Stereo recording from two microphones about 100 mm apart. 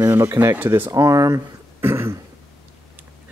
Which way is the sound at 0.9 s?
35° right (ahead or behind).